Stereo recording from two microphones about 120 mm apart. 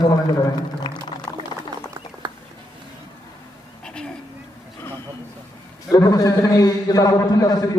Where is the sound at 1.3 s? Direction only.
30° left (ahead or behind).